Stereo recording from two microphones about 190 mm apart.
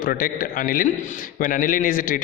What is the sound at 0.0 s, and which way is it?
A man's voice, 50° left (ahead or behind).